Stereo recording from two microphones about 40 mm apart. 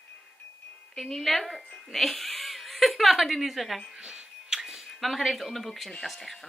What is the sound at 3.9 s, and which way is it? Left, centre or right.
Music, right.